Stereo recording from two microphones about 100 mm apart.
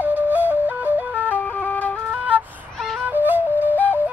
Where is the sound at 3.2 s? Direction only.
20° right (ahead or behind).